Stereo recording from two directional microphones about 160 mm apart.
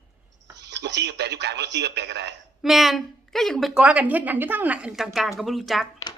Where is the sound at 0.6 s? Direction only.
90° right.